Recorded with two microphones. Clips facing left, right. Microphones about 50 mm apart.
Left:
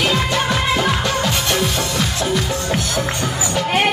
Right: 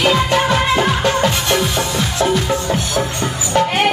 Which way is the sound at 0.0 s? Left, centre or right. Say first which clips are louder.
Right 4 dB; right.